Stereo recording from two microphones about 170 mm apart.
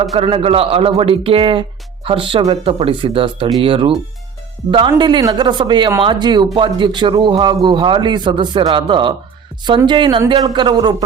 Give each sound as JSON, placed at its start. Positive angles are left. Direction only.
{"t": 0.0, "sound": "a man's voice", "side_deg": -40}